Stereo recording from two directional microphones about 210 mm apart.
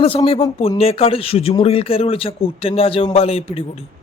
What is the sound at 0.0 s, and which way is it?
Speech, 25° left (ahead or behind).